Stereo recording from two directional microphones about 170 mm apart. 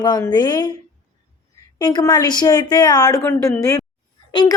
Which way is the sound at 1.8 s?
25° left (ahead or behind).